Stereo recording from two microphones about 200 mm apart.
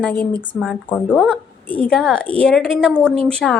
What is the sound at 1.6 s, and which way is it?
A woman's voice, 5° left (ahead or behind).